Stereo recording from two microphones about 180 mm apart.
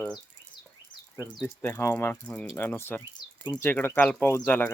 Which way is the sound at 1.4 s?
15° left (ahead or behind).